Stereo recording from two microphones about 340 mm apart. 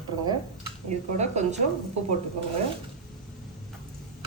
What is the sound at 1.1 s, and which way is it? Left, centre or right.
Speech, centre.